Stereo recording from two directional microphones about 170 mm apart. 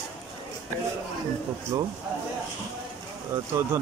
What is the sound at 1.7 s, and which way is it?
Speech, 15° right (ahead or behind).